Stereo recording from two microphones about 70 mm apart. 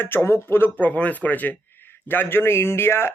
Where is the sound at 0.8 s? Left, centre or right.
Left.